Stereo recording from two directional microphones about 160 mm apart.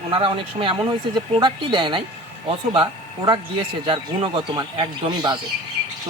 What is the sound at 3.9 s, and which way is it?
Speech, 30° right (ahead or behind).